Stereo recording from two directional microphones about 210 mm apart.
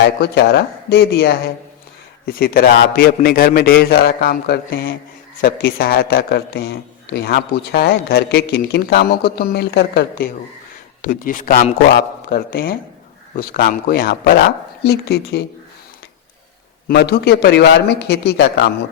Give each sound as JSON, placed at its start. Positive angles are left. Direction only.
{"t": 0.2, "sound": "a man's voice", "side_deg": 50}
{"t": 11.0, "sound": "a man's voice", "side_deg": 40}
{"t": 16.9, "sound": "a man's voice", "side_deg": 50}